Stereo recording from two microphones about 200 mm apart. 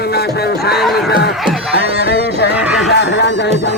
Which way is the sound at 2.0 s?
60° left (ahead or behind).